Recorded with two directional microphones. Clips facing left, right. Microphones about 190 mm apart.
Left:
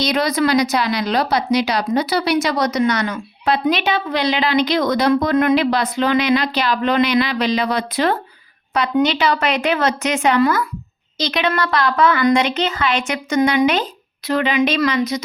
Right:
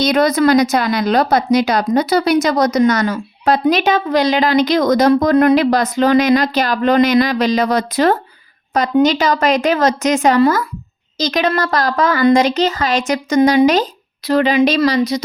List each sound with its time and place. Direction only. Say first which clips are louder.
0.0 s a woman's voice: right 5 dB; 50° right (ahead or behind)